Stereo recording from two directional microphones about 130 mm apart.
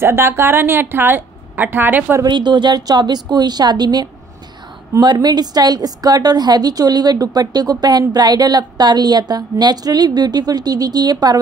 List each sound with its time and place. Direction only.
0.0 s a woman's voice: 20° right (ahead or behind)
2.2 s a woman's voice: 35° right (ahead or behind)